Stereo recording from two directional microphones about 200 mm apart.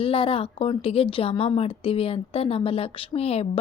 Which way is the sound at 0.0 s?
25° left (ahead or behind).